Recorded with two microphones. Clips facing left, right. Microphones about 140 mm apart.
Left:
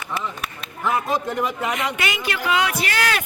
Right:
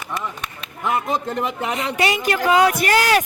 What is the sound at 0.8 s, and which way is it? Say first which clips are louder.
A man's voice: even; 20° right (ahead or behind).